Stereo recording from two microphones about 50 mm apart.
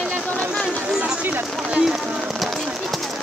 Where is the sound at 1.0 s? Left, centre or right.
Right.